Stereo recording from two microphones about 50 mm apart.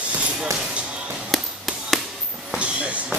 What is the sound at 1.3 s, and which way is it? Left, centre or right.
Chop, centre.